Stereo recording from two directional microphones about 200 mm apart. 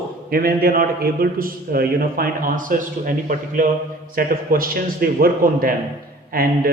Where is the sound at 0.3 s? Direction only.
50° right (ahead or behind).